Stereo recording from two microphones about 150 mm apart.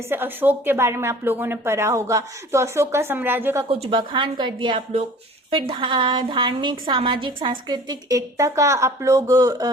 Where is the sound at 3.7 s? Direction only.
35° right (ahead or behind).